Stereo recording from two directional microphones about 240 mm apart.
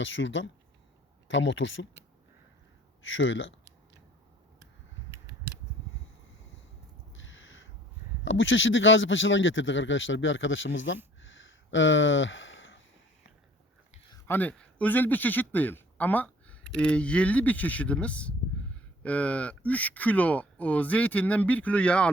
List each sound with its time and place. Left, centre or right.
0.0 s speech: left
3.0 s speech: left
7.1 s crow: left
8.2 s a man's voice: left
14.1 s speech: centre